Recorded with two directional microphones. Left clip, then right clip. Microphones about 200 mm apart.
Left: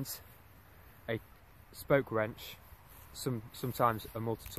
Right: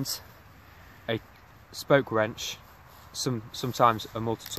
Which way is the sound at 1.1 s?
10° left (ahead or behind).